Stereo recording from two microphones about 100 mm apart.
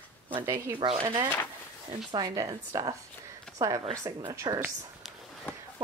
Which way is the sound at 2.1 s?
40° right (ahead or behind).